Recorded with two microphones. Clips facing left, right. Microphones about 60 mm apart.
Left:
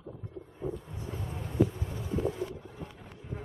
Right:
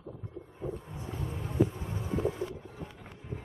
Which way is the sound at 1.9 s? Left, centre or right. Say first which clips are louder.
Even; right.